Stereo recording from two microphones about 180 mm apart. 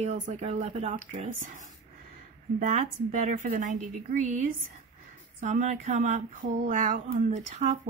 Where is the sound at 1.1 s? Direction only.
45° right (ahead or behind).